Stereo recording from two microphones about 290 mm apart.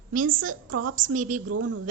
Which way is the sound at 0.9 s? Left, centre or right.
Right.